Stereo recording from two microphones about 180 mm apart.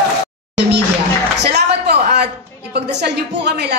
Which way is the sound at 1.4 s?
70° right (ahead or behind).